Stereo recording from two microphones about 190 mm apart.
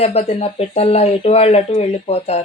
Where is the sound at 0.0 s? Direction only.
35° left (ahead or behind).